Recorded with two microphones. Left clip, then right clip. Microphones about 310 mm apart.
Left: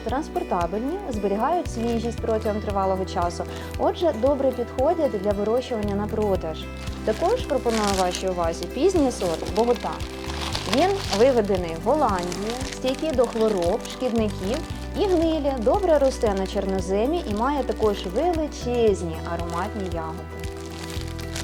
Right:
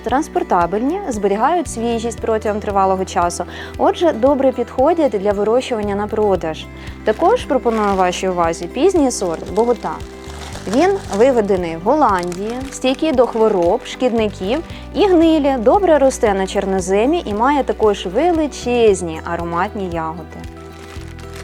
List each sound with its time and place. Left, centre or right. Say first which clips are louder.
0.1 s a woman's voice: right 10 dB; right
9.6 s speech: right 6 dB; right
10.8 s a woman's voice: right 6 dB; right